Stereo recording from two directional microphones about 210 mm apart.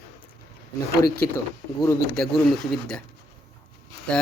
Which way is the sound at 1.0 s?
45° left (ahead or behind).